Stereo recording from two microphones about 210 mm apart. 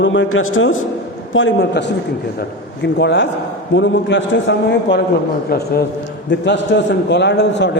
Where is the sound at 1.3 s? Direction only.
60° left (ahead or behind).